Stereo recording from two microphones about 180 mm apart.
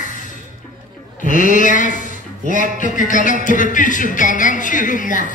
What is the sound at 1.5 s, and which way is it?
Speech, 45° left (ahead or behind).